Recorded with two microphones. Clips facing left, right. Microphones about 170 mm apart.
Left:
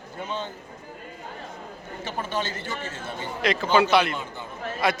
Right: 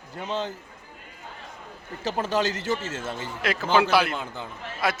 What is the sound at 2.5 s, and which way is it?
Speech, 90° right.